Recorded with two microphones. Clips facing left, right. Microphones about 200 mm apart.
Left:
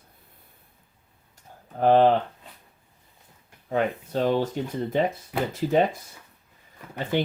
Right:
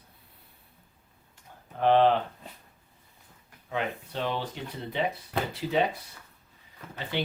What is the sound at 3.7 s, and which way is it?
Speech, 45° left (ahead or behind).